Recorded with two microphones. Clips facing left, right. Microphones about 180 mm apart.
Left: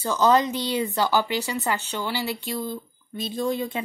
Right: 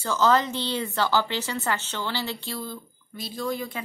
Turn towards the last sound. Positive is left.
turn(degrees=25)  # may be behind; listen again after turning